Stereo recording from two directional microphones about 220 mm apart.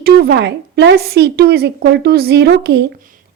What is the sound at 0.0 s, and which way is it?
A woman's voice, 45° right (ahead or behind).